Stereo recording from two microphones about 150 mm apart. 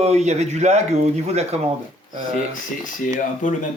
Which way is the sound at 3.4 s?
60° left (ahead or behind).